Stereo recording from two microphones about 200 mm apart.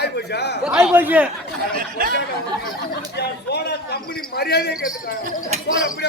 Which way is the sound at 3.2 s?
55° left (ahead or behind).